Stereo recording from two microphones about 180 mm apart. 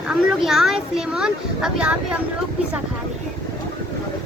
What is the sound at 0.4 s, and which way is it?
A child's voice, centre (ahead or behind).